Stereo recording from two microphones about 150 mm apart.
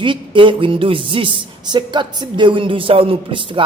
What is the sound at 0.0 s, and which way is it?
Speech, 35° right (ahead or behind).